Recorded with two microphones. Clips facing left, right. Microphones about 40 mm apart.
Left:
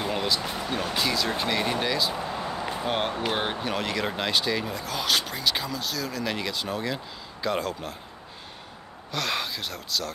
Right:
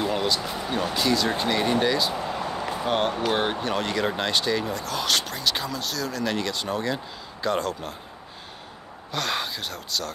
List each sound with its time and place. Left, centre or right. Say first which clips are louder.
0.0 s speech: right 2 dB; centre
9.1 s speech: right 1 dB; centre